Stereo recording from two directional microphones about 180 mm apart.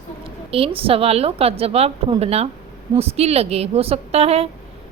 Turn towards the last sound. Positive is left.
turn(degrees=-35)  # may be behind; listen again after turning